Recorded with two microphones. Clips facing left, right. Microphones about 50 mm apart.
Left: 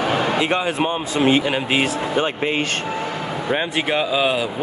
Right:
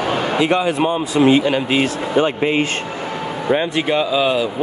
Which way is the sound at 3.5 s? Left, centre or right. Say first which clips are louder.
Right 3 dB; centre.